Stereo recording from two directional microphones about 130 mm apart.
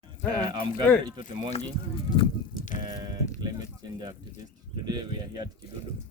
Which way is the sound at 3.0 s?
30° right (ahead or behind).